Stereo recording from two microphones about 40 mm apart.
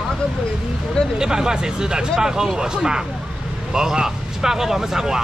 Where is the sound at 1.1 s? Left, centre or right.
Centre.